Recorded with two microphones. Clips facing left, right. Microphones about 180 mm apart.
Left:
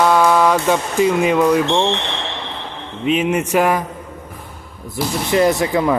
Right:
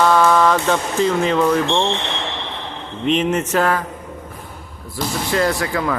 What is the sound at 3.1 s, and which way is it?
Speech, 5° left (ahead or behind).